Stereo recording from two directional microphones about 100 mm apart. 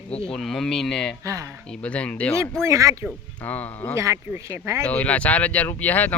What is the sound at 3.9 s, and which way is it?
Speech, 30° right (ahead or behind).